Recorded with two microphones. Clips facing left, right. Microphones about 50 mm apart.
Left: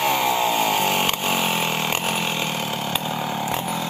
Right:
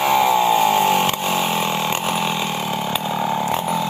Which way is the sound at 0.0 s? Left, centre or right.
Centre.